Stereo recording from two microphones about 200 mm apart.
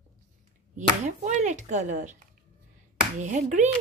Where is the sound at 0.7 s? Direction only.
35° right (ahead or behind).